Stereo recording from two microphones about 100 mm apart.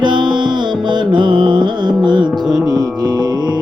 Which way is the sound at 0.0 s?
50° right (ahead or behind).